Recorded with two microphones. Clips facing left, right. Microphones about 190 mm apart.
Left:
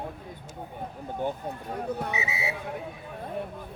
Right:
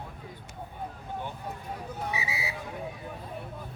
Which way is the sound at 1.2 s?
45° left (ahead or behind).